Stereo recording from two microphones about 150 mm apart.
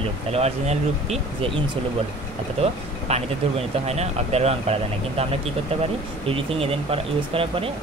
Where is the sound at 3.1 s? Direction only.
45° right (ahead or behind).